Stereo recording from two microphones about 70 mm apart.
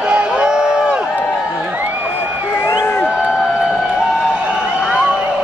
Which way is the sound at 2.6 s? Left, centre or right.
Left.